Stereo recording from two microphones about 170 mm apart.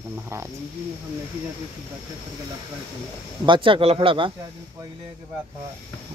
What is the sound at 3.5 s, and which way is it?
Speech, 30° right (ahead or behind).